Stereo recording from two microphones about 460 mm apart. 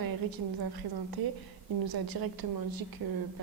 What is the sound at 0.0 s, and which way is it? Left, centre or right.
A woman's voice, right.